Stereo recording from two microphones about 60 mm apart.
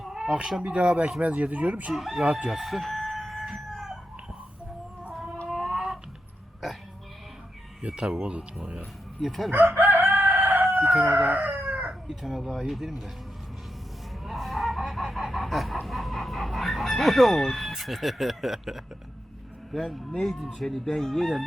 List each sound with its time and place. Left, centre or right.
0.0 s a sound: centre
0.6 s speech: centre
1.9 s speech: centre
2.2 s speech: centre
2.5 s chicken: centre
5.5 s a sound: centre
7.8 s speech: centre
9.2 s speech: centre
9.5 s chicken: right
12.0 s speech: centre
14.3 s chicken: centre
19.7 s speech: centre